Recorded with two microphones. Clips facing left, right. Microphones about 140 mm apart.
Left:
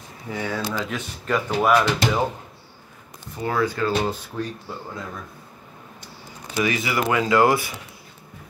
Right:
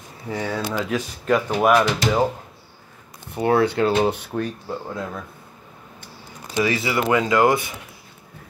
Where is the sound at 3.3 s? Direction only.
65° right (ahead or behind).